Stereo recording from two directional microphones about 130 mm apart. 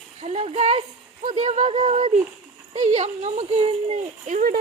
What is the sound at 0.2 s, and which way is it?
Speech, 55° right (ahead or behind).